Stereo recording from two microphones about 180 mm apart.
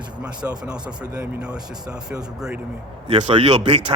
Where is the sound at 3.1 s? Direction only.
30° right (ahead or behind).